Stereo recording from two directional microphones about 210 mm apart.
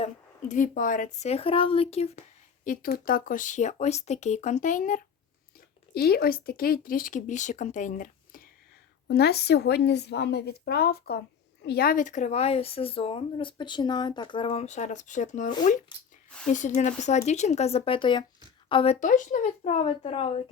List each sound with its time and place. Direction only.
0.0 s speech: 35° left (ahead or behind)
2.6 s speech: 45° left (ahead or behind)
9.0 s a woman's voice: 50° left (ahead or behind); by 20.3 s 30° left (ahead or behind)